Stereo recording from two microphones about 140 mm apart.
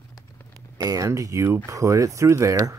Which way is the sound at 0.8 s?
25° right (ahead or behind).